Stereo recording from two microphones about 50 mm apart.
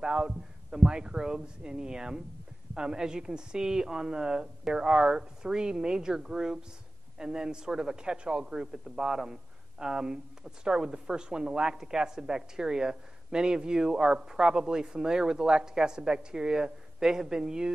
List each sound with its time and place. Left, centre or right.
0.0 s speech: centre